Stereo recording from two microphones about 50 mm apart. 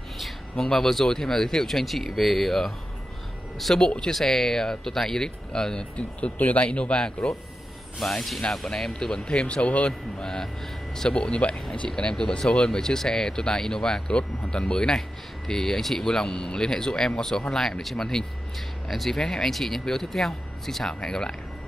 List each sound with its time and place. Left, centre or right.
0.6 s speech: centre; by 7.2 s left
8.0 s speech: centre
8.4 s speech: centre
8.7 s speech: centre
9.1 s speech: centre
10.2 s speech: centre